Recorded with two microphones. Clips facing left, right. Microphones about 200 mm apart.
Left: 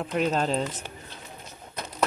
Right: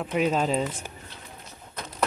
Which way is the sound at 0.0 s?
5° right (ahead or behind).